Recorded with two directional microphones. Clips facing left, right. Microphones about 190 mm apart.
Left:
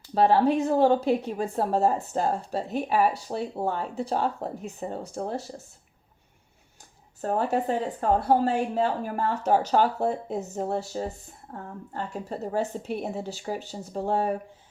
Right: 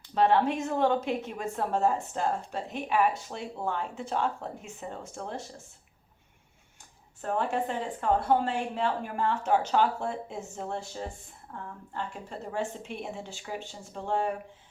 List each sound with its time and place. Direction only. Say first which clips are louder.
0.1 s a woman's voice: left 4 dB; 35° left (ahead or behind)
7.2 s a woman's voice: left 4 dB; 40° left (ahead or behind)